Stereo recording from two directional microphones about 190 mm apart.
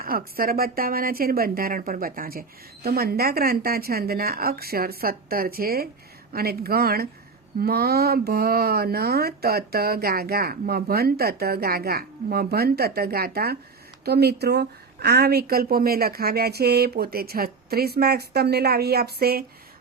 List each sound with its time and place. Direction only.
0.0 s a woman's voice: 50° right (ahead or behind)